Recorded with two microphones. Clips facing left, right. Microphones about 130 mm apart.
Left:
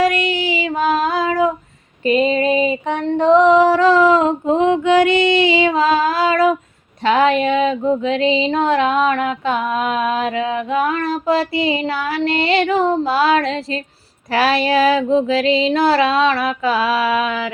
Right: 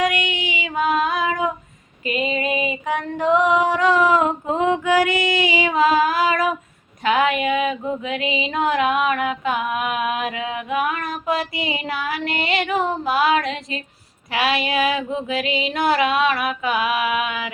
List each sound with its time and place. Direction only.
0.0 s female singing: 35° left (ahead or behind)